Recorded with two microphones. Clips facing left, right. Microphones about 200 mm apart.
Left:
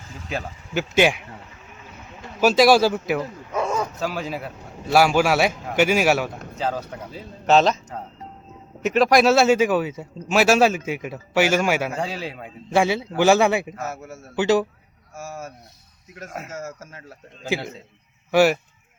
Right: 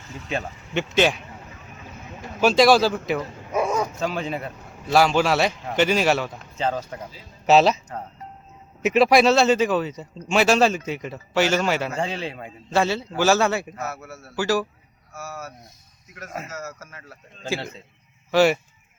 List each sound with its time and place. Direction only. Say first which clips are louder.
0.3 s speech: right 1 dB; 5° left (ahead or behind)
2.4 s speech: left 1 dB; 5° left (ahead or behind)
3.5 s bow-wow: right 2 dB; 10° right (ahead or behind)
3.8 s speech: right 1 dB; 5° left (ahead or behind)
8.8 s a man's voice: even; 5° right (ahead or behind); by 14.7 s 20° left (ahead or behind)
16.5 s a man's voice: left 2 dB; 25° left (ahead or behind)
18.3 s speech: left 1 dB; 10° left (ahead or behind)